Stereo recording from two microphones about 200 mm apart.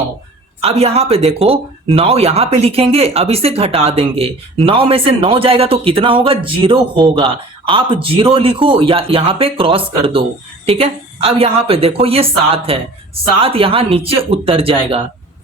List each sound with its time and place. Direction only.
0.6 s speech: 30° right (ahead or behind)